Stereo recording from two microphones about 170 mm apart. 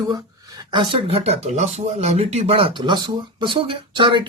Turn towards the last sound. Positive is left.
turn(degrees=-30)  # may be behind; listen again after turning